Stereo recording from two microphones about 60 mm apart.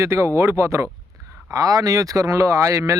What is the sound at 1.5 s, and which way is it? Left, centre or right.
Speech, right.